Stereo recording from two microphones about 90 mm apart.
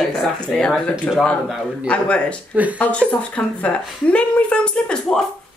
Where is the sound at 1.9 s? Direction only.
10° left (ahead or behind).